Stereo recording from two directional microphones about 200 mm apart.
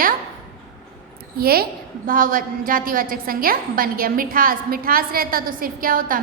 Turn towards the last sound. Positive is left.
turn(degrees=-45)  # may be behind; listen again after turning